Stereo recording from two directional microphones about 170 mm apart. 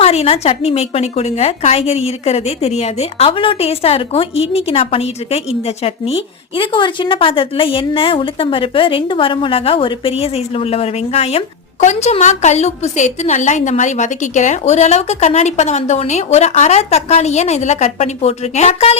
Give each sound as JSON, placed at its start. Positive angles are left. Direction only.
{"t": 0.0, "sound": "a woman's voice", "side_deg": 35}